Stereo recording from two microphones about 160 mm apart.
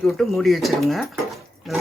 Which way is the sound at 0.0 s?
Centre (ahead or behind).